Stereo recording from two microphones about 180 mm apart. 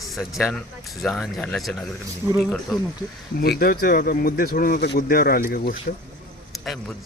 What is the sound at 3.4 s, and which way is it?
Speech, 55° left (ahead or behind).